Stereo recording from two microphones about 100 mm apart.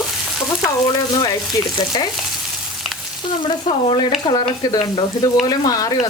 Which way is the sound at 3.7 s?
65° left (ahead or behind).